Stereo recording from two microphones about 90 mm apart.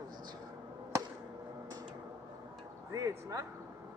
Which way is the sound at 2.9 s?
40° right (ahead or behind).